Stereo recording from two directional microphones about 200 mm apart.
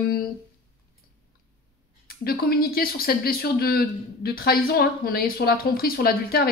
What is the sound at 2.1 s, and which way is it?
A woman's voice, 50° left (ahead or behind).